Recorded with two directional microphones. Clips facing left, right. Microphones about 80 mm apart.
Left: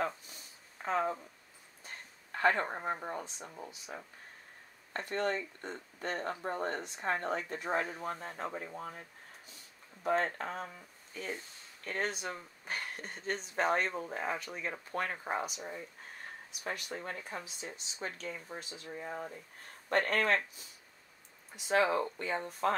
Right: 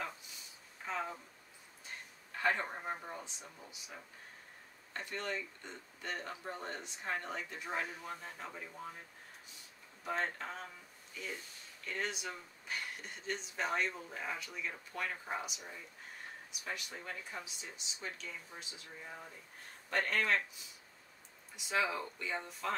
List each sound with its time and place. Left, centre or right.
0.8 s speech: left
2.3 s speech: left
10.0 s speech: left
19.9 s speech: left